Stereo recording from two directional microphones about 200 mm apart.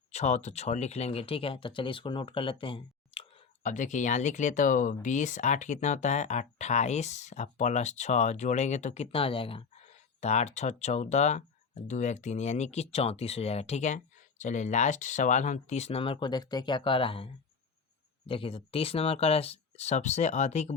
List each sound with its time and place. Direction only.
0.1 s speech: 35° left (ahead or behind)
18.3 s speech: 25° left (ahead or behind)